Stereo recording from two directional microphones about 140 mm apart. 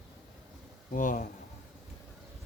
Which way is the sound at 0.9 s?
65° left (ahead or behind).